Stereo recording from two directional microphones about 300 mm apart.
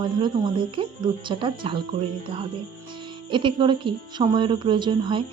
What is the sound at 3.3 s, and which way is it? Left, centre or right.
Speech, centre.